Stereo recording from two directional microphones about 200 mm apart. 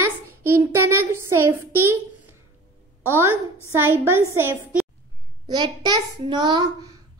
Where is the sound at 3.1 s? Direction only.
10° right (ahead or behind).